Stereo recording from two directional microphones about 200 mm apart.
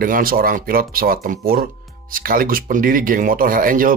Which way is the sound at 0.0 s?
45° right (ahead or behind).